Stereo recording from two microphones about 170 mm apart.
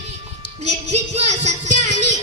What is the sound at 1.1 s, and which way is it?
Music, 40° right (ahead or behind).